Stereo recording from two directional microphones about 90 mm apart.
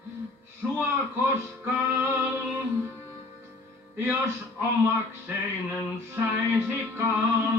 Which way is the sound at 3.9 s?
25° right (ahead or behind).